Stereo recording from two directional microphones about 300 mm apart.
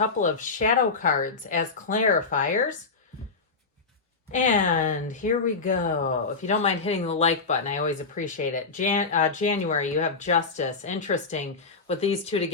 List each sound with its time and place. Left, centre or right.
0.2 s speech: left
4.3 s speech: left